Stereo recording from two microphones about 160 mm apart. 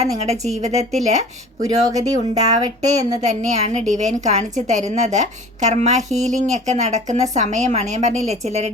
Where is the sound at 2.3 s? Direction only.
45° right (ahead or behind).